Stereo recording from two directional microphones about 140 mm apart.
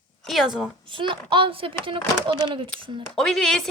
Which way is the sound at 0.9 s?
35° right (ahead or behind).